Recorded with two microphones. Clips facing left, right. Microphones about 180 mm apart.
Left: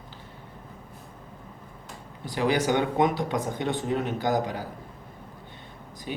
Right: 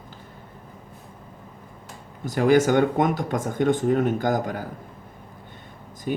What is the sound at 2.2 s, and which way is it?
Speech, 45° right (ahead or behind).